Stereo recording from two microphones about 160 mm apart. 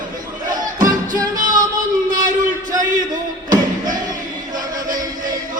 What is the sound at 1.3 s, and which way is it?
Music, 55° right (ahead or behind).